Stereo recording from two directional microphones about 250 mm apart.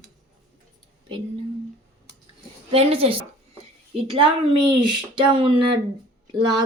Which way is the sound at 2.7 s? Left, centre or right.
Right.